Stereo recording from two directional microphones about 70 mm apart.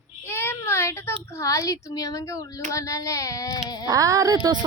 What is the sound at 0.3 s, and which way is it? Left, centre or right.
A child's voice, left.